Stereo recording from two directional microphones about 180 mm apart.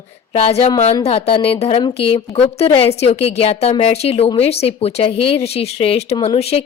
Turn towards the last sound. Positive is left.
turn(degrees=35)  # may be behind; listen again after turning